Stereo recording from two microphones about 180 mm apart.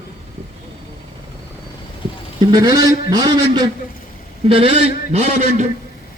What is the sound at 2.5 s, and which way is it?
A man's voice, 20° right (ahead or behind).